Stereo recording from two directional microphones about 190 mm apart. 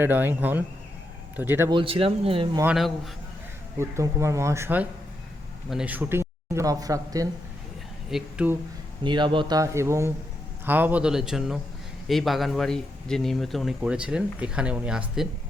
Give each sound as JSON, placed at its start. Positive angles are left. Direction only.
{"t": 0.0, "sound": "speech", "side_deg": -10}
{"t": 1.7, "sound": "speech", "side_deg": -30}
{"t": 3.8, "sound": "speech", "side_deg": -15}
{"t": 8.1, "sound": "speech", "side_deg": -5}
{"t": 9.0, "sound": "speech", "side_deg": -25}